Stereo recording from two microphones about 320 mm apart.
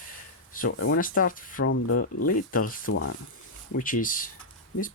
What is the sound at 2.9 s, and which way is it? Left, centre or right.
Speech, left.